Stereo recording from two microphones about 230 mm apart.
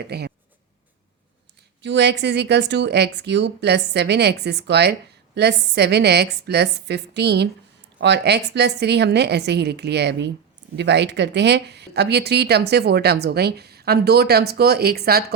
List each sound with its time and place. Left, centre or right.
0.0 s speech: right
1.8 s speech: right